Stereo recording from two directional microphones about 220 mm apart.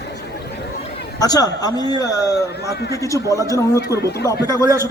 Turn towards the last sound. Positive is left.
turn(degrees=15)  # may be behind; listen again after turning